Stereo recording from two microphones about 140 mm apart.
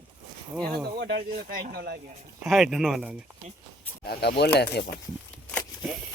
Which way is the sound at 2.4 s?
Centre (ahead or behind).